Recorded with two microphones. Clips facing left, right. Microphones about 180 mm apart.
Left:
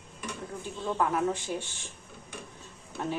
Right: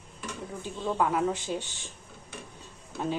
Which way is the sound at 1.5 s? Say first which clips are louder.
Right 1 dB; 20° right (ahead or behind).